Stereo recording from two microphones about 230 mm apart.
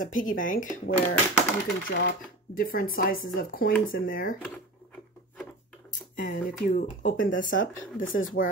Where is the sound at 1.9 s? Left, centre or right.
Left.